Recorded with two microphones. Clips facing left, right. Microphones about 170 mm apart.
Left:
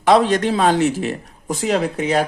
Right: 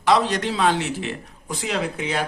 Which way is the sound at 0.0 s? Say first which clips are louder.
Left 5 dB; 50° left (ahead or behind).